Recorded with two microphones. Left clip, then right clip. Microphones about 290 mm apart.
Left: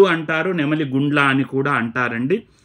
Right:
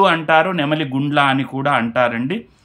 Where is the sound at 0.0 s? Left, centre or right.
Centre.